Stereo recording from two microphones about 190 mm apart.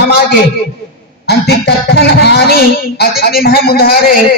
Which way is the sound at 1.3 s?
60° left (ahead or behind).